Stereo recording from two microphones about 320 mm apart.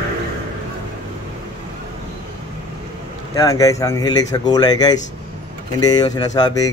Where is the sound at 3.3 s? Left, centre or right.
Centre.